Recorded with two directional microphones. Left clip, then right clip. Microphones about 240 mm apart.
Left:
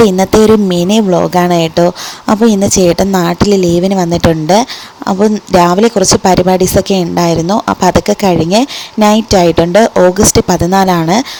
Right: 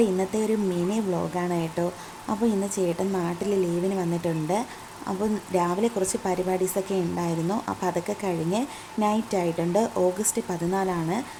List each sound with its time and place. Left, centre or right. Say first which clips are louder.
0.2 s speech: left 19 dB; left